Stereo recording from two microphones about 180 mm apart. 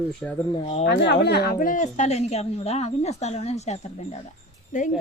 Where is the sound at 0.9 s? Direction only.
70° left (ahead or behind); by 3.9 s 35° left (ahead or behind).